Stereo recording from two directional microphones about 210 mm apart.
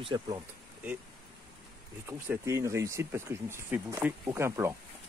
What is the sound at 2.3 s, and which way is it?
Speech, 15° right (ahead or behind).